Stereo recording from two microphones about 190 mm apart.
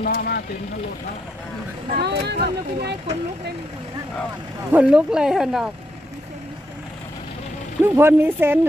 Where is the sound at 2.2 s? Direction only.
60° right (ahead or behind).